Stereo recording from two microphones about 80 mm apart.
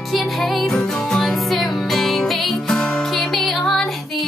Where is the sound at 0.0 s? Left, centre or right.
Centre.